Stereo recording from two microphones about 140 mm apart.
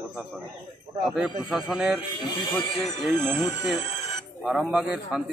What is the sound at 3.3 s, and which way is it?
Speech, 25° left (ahead or behind).